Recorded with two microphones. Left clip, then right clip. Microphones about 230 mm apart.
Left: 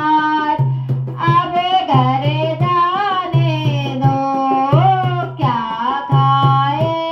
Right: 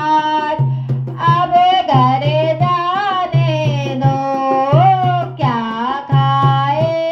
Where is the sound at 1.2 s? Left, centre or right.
Right.